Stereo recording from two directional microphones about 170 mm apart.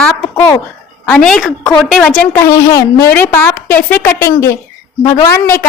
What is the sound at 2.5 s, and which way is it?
A woman's voice, 20° left (ahead or behind).